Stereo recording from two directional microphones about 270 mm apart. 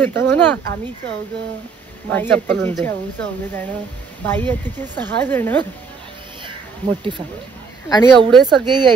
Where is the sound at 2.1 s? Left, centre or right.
Centre.